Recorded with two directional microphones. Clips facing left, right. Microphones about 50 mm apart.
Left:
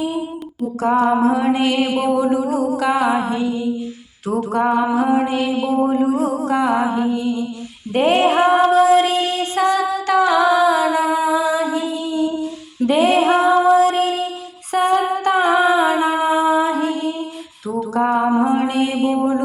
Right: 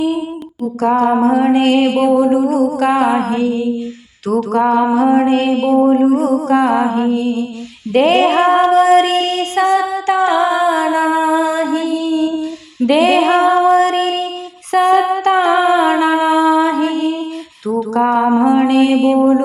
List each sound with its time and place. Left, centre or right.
0.8 s music: right
7.9 s a sound: right
14.7 s humming: right
17.7 s music: right
18.2 s music: right
19.1 s speech: right